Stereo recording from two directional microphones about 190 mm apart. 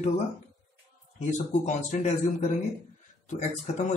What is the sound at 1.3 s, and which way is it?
Speech, 40° left (ahead or behind).